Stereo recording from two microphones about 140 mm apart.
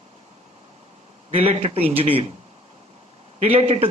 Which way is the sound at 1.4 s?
45° right (ahead or behind).